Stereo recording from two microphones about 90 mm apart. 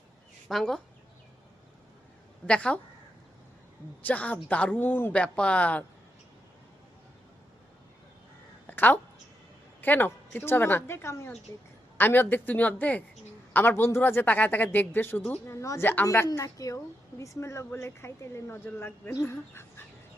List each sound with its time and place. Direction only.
0.4 s speech: 5° left (ahead or behind)
2.5 s speech: 10° left (ahead or behind)
4.0 s speech: 15° left (ahead or behind)
8.6 s a sound: 20° left (ahead or behind)
9.8 s speech: 20° left (ahead or behind)
15.4 s speech: 35° left (ahead or behind)